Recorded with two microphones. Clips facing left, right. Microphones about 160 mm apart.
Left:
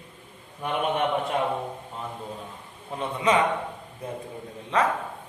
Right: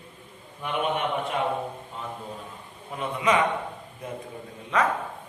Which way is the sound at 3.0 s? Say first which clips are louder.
Left 1 dB; 30° left (ahead or behind).